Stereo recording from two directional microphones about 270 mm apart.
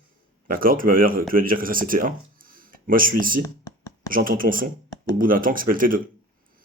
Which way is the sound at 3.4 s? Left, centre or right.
Centre.